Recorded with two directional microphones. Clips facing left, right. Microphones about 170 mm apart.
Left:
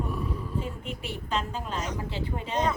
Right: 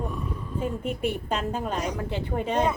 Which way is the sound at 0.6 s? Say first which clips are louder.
Right 7 dB; 50° right (ahead or behind).